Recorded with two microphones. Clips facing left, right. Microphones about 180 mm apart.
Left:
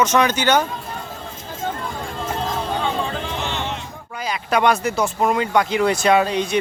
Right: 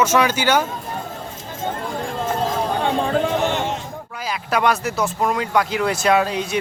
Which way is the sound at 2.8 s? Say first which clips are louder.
Right 5 dB; 50° right (ahead or behind).